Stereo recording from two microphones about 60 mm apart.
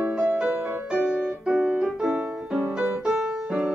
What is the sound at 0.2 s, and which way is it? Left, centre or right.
Music, right.